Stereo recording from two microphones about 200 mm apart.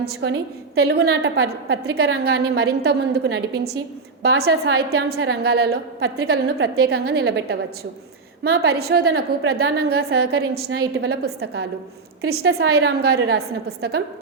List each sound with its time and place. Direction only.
0.2 s a woman's voice: 60° right (ahead or behind)